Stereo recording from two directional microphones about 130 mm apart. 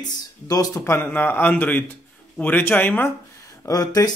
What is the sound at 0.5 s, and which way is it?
A man's voice, 25° left (ahead or behind).